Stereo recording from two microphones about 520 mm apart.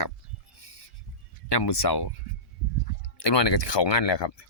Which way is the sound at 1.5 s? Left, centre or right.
Left.